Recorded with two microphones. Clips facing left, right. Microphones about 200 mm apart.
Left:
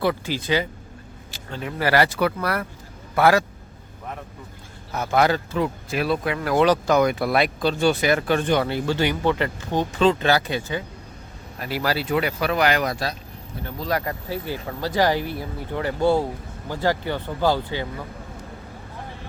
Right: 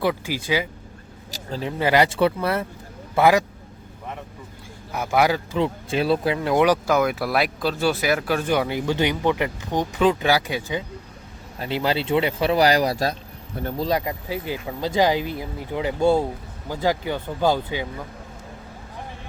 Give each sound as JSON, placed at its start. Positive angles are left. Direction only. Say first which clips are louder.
{"t": 0.0, "sound": "speech", "louder": "even", "side_deg": -10}
{"t": 1.3, "sound": "a sound", "louder": "right 3 dB", "side_deg": -35}
{"t": 1.8, "sound": "speech", "louder": "right 1 dB", "side_deg": -20}
{"t": 4.9, "sound": "speech", "louder": "even", "side_deg": -10}
{"t": 5.5, "sound": "speech", "louder": "right 2 dB", "side_deg": -25}
{"t": 13.8, "sound": "speech", "louder": "even", "side_deg": -15}